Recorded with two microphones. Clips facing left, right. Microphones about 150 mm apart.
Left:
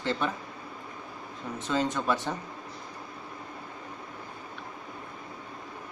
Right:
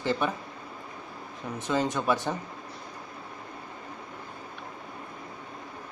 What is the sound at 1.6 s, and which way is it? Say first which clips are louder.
Speech: right 1 dB; 15° right (ahead or behind).